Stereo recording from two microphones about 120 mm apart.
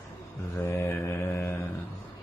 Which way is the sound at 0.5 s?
20° left (ahead or behind).